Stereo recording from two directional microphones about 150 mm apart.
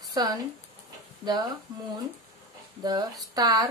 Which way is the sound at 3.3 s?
25° right (ahead or behind).